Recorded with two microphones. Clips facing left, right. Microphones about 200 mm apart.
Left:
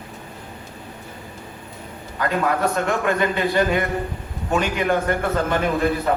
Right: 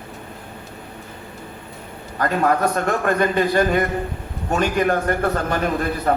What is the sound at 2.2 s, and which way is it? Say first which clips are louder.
A man's voice: right 2 dB; 45° right (ahead or behind).